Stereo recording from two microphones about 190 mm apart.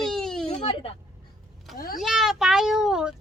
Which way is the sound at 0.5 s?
30° left (ahead or behind).